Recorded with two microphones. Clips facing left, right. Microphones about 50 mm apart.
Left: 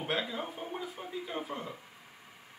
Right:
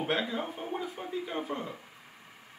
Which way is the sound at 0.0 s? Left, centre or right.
Centre.